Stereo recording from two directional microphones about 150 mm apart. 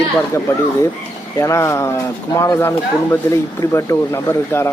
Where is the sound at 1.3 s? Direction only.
20° left (ahead or behind).